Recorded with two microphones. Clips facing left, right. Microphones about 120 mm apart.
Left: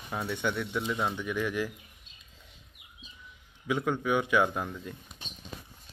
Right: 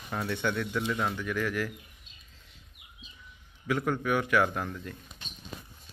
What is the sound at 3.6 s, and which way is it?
Speech, 15° left (ahead or behind).